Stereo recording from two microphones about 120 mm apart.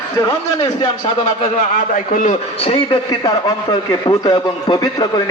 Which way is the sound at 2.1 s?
90° left.